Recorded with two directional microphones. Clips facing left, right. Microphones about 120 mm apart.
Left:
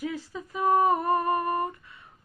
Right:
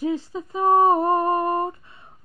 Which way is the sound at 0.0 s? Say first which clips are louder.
Right 8 dB; 25° right (ahead or behind).